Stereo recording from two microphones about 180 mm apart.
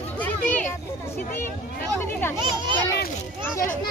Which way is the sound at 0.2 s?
10° left (ahead or behind).